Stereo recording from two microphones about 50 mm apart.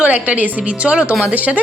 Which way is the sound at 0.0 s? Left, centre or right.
Right.